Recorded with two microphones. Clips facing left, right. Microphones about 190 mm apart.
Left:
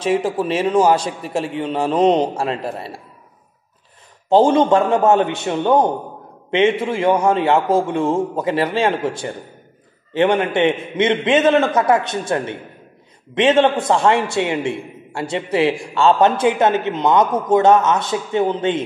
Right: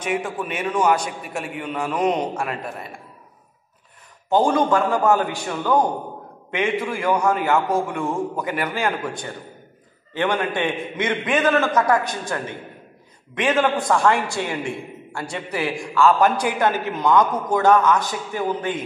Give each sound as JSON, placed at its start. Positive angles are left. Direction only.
{"t": 0.0, "sound": "a man's voice", "side_deg": 30}
{"t": 4.3, "sound": "a man's voice", "side_deg": 25}
{"t": 10.1, "sound": "a man's voice", "side_deg": 25}